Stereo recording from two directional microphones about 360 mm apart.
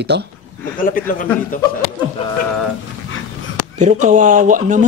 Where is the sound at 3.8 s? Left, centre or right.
Centre.